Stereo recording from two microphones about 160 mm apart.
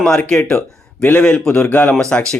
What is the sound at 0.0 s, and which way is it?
Speech, 5° left (ahead or behind).